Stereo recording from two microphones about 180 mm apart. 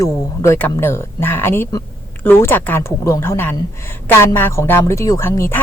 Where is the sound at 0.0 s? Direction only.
15° left (ahead or behind).